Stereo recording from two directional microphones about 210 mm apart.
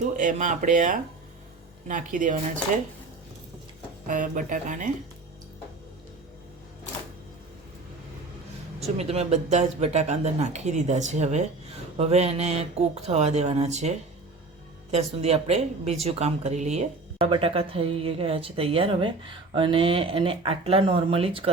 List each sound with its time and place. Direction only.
0.0 s speech: 35° right (ahead or behind)
4.0 s speech: 40° right (ahead or behind)
8.8 s speech: 30° right (ahead or behind)